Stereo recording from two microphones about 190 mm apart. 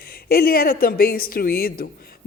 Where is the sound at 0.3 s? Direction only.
50° left (ahead or behind).